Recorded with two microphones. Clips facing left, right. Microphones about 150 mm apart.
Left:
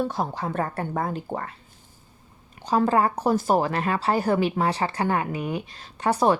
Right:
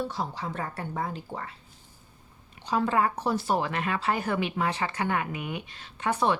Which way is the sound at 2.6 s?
40° left (ahead or behind).